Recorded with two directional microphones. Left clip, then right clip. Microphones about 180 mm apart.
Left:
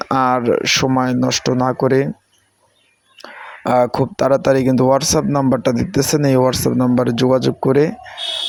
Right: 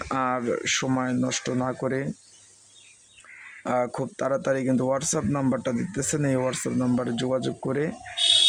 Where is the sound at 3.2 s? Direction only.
30° left (ahead or behind).